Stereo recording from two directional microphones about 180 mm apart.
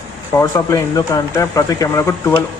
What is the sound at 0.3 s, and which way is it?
A man's voice, 20° left (ahead or behind).